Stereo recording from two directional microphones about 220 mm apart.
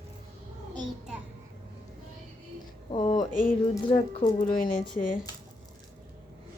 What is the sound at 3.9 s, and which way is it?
A woman's voice, 35° left (ahead or behind).